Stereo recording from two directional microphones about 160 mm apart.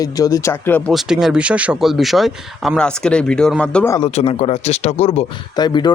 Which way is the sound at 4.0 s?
40° left (ahead or behind).